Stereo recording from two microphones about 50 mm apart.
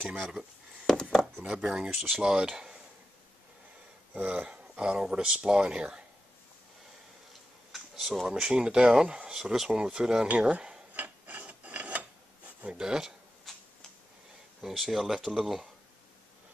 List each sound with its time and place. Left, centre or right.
0.8 s a sound: centre
1.5 s speech: centre
2.2 s speech: centre
4.1 s speech: right
4.5 s speech: centre
7.7 s a sound: centre
8.3 s speech: centre
10.2 s speech: right
11.0 s filing: right
12.6 s speech: centre
13.5 s tick-tock: centre
14.6 s speech: centre